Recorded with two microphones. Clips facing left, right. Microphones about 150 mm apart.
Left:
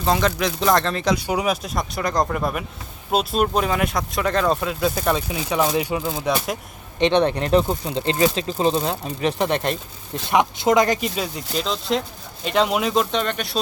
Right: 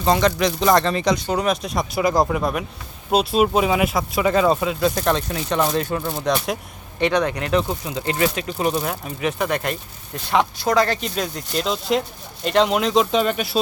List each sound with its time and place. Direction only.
0.0 s speech: centre (ahead or behind)
7.0 s speech: 25° left (ahead or behind)
11.1 s speech: centre (ahead or behind)